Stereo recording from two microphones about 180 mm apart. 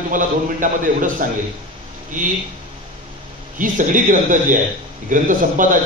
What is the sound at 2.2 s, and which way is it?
Speech, 50° right (ahead or behind).